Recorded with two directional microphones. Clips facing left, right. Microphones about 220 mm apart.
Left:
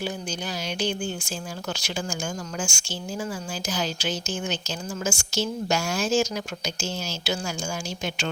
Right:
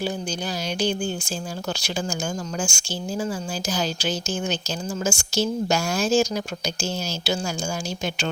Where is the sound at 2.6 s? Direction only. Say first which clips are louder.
Right 3 dB; 35° right (ahead or behind).